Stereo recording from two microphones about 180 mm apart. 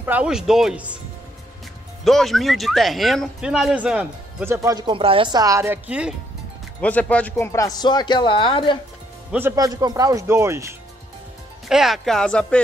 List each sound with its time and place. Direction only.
0.0 s speech: 10° right (ahead or behind)
2.0 s speech: centre (ahead or behind)
6.8 s a man's voice: 10° left (ahead or behind); by 8.7 s 25° left (ahead or behind)
9.6 s speech: 20° right (ahead or behind)
11.7 s speech: centre (ahead or behind)